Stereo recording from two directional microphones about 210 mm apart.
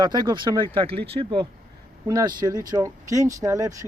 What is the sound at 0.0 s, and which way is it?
Speech, 20° right (ahead or behind).